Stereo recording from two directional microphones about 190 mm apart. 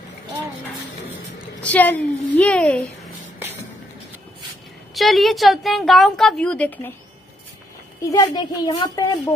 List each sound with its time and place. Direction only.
1.6 s a woman's voice: 10° left (ahead or behind)
4.9 s a woman's voice: centre (ahead or behind)
8.0 s a child's voice: 20° left (ahead or behind)